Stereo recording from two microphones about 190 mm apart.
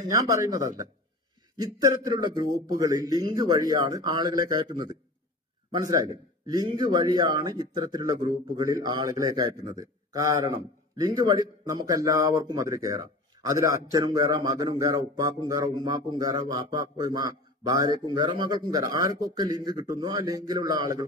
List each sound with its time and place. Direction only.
0.1 s a man's voice: 15° right (ahead or behind)
5.7 s a man's voice: 20° right (ahead or behind)